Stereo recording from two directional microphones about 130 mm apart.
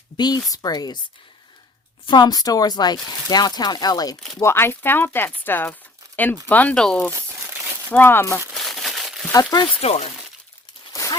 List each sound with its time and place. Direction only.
0.2 s speech: 30° left (ahead or behind)
2.0 s speech: 35° left (ahead or behind)
4.4 s speech: 20° left (ahead or behind)
7.1 s speech: 20° right (ahead or behind)
7.9 s speech: 15° left (ahead or behind)
8.5 s crumpling: centre (ahead or behind)
9.3 s speech: 30° left (ahead or behind)
9.8 s speech: 55° left (ahead or behind)
10.9 s a sound: 25° left (ahead or behind)